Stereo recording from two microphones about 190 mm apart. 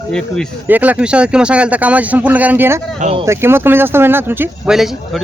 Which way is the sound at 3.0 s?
35° right (ahead or behind).